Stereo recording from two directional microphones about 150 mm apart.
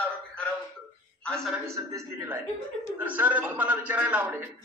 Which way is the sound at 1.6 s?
20° right (ahead or behind).